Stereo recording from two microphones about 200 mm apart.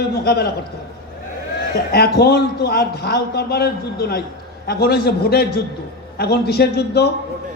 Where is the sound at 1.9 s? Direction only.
50° left (ahead or behind).